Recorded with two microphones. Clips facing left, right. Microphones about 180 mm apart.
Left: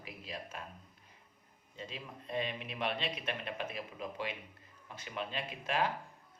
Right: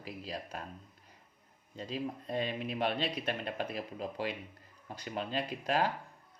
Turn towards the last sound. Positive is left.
turn(degrees=-35)  # may be behind; listen again after turning